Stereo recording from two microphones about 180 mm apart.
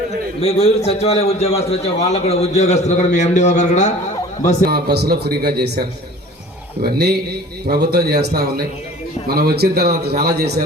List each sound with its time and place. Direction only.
0.4 s a man's voice: 35° left (ahead or behind)
4.7 s a man's voice: 60° right (ahead or behind)
6.8 s a man's voice: 65° right (ahead or behind)